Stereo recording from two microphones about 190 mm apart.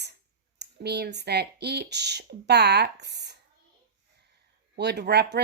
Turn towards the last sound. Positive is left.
turn(degrees=-60)  # may be behind; listen again after turning